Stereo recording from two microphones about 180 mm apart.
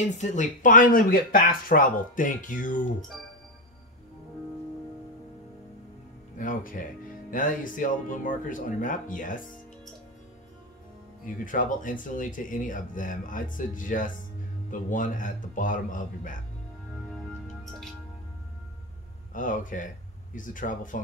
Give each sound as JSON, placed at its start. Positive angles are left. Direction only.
{"t": 0.0, "sound": "speech", "side_deg": 40}
{"t": 6.3, "sound": "speech", "side_deg": 45}
{"t": 11.2, "sound": "speech", "side_deg": 50}
{"t": 19.3, "sound": "speech", "side_deg": 45}